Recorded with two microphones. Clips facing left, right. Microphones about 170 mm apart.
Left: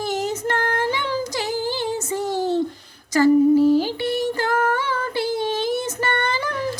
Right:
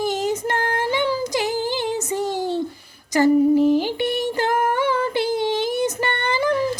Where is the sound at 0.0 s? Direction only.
15° right (ahead or behind).